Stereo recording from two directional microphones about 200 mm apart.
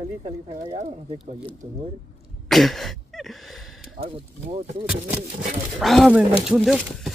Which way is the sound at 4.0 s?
30° right (ahead or behind).